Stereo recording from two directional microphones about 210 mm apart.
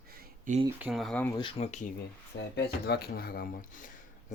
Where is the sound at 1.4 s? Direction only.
30° left (ahead or behind).